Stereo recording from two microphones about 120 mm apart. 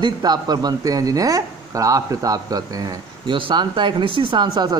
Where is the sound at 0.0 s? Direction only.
35° right (ahead or behind).